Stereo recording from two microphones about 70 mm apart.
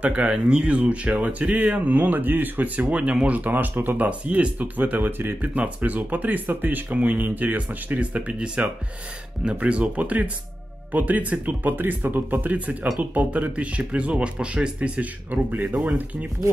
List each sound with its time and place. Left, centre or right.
0.0 s speech: centre